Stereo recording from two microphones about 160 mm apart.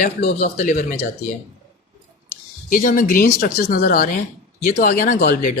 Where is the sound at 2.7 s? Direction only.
55° left (ahead or behind).